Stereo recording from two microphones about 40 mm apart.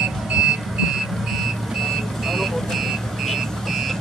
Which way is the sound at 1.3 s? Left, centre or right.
Centre.